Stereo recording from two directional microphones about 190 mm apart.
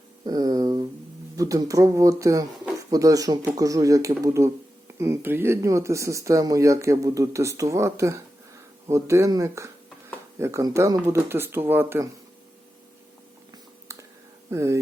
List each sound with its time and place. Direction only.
0.3 s speech: 20° right (ahead or behind)
13.9 s a sound: 15° right (ahead or behind)
14.5 s speech: 15° right (ahead or behind)